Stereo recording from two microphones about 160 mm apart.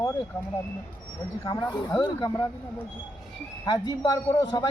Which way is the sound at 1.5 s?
25° left (ahead or behind).